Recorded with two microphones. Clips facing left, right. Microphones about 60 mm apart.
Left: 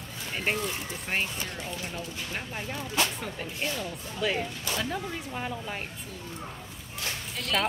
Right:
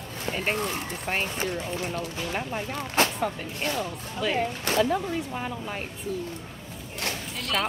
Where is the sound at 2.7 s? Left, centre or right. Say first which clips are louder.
Right 4 dB; right.